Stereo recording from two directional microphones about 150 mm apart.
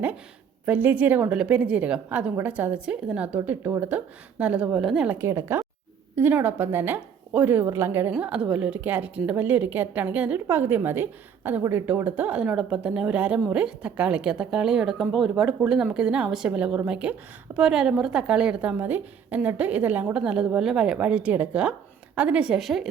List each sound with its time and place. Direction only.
0.6 s a woman's voice: 10° right (ahead or behind)
5.1 s a woman's voice: 20° right (ahead or behind); by 22.9 s centre (ahead or behind)